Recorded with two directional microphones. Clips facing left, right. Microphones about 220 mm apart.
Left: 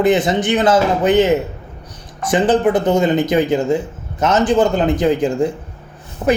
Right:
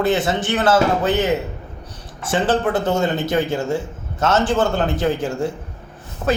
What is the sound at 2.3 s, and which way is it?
A man's voice, 15° left (ahead or behind).